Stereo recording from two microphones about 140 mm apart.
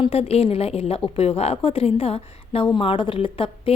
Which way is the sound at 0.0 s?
45° left (ahead or behind).